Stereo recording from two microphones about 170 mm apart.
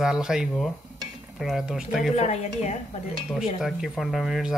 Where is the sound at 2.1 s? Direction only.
40° left (ahead or behind).